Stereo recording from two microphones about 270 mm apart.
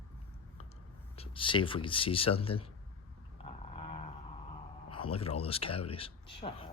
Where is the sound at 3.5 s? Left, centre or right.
Left.